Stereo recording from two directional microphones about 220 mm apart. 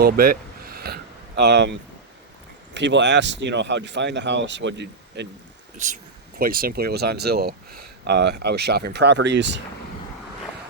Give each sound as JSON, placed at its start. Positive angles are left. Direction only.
{"t": 0.0, "sound": "a sound", "side_deg": -45}
{"t": 1.4, "sound": "speech", "side_deg": -50}
{"t": 5.7, "sound": "speech", "side_deg": -35}